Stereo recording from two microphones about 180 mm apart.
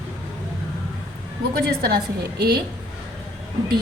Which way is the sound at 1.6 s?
60° right (ahead or behind).